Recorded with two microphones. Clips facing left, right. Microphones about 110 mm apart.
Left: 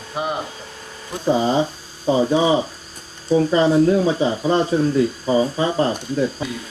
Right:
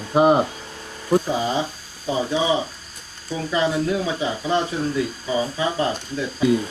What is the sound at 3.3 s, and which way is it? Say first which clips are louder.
Speech: left 7 dB; 35° left (ahead or behind).